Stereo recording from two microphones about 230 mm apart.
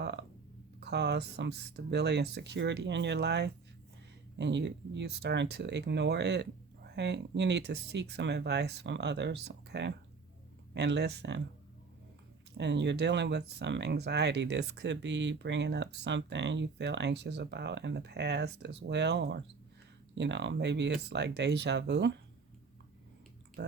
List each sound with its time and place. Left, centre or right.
0.0 s a sound: right
0.8 s speech: right
12.5 s speech: right
23.6 s pig: right